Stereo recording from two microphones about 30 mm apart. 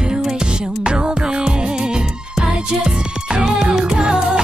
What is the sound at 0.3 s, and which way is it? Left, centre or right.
Music, right.